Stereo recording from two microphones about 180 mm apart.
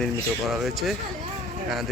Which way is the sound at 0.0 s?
Centre (ahead or behind).